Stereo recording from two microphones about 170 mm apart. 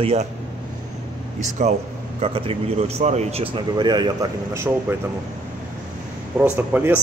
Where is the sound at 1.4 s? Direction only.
40° right (ahead or behind); by 4.3 s 25° right (ahead or behind).